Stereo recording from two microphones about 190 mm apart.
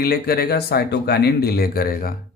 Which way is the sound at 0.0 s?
55° left (ahead or behind).